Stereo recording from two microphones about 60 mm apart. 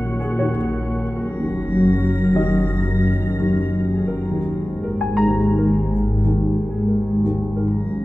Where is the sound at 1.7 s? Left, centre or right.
Left.